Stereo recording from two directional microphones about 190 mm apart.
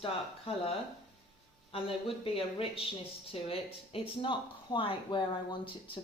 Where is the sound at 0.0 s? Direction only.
30° left (ahead or behind).